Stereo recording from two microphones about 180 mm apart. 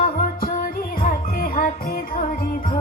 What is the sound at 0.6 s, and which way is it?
Music, 55° left (ahead or behind).